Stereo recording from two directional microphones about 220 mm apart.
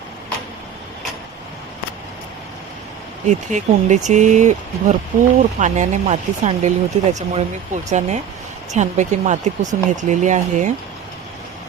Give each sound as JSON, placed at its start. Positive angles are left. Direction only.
{"t": 3.2, "sound": "speech", "side_deg": -35}